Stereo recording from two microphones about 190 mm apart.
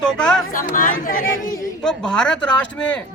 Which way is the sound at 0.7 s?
45° left (ahead or behind).